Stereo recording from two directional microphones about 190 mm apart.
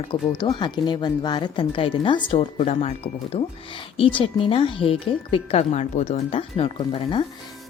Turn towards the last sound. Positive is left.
turn(degrees=25)  # may be behind; listen again after turning